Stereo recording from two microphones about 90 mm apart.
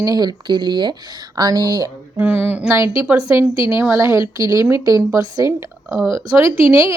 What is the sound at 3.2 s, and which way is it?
Speech, 35° right (ahead or behind).